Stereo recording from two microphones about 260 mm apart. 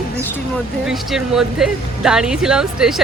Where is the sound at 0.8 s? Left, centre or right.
Centre.